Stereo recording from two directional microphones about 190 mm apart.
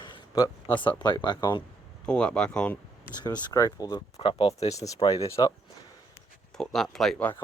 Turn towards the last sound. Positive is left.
turn(degrees=10)  # may be behind; listen again after turning